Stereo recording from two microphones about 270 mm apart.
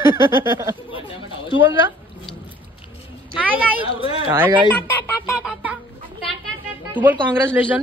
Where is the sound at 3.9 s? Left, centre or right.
Centre.